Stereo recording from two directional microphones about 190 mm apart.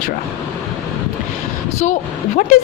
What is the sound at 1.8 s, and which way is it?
Speech, 40° left (ahead or behind).